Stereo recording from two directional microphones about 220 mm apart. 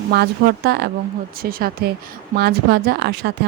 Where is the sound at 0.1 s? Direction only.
45° right (ahead or behind).